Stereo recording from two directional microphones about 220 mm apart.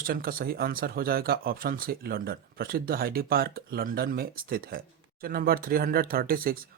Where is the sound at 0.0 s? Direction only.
40° right (ahead or behind).